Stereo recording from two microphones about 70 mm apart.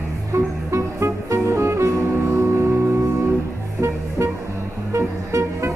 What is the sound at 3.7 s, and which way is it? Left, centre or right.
Music, right.